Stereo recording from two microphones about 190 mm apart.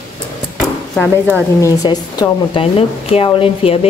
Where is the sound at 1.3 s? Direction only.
15° left (ahead or behind).